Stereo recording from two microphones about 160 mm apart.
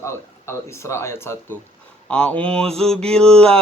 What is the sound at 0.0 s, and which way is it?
Speech, 15° left (ahead or behind).